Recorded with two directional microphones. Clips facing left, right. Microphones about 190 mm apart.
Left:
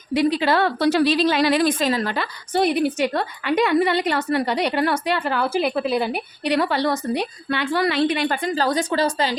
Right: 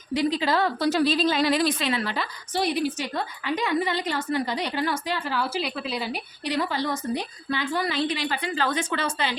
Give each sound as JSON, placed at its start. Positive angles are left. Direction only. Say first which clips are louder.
{"t": 0.1, "sound": "a woman's voice", "louder": "left 5 dB", "side_deg": 65}
{"t": 1.6, "sound": "a woman's voice", "louder": "left 5 dB", "side_deg": 40}
{"t": 2.1, "sound": "a woman's voice", "louder": "left 6 dB", "side_deg": 55}